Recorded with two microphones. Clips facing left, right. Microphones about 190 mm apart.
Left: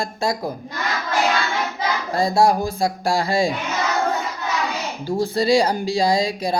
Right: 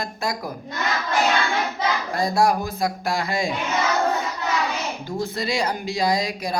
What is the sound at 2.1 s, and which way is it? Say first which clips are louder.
Speech: left 4 dB; 25° left (ahead or behind).